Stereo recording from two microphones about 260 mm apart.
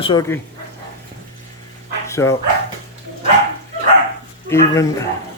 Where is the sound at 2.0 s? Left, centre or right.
Centre.